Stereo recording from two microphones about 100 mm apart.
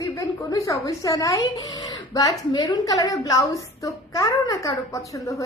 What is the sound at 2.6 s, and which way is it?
A child's voice, 35° left (ahead or behind).